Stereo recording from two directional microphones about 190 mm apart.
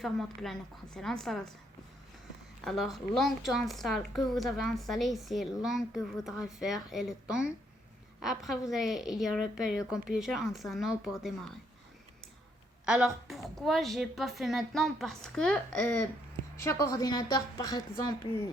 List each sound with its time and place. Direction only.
0.0 s a woman's voice: centre (ahead or behind)
2.6 s a woman's voice: centre (ahead or behind)
12.8 s a woman's voice: 5° right (ahead or behind)
16.6 s a woman's voice: 15° left (ahead or behind)